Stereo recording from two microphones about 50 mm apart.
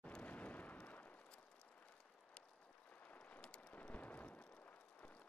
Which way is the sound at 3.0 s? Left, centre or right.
Left.